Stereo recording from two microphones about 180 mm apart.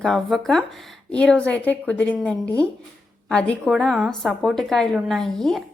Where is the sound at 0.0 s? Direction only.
Centre (ahead or behind).